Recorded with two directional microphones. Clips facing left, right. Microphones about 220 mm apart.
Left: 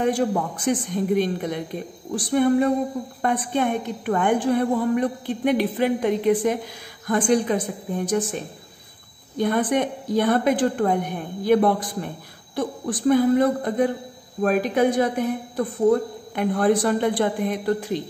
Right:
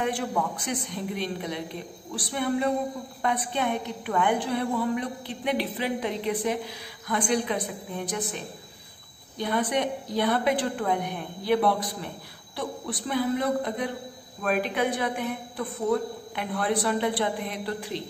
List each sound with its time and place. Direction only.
0.0 s a woman's voice: 45° left (ahead or behind)
9.4 s a woman's voice: 50° left (ahead or behind)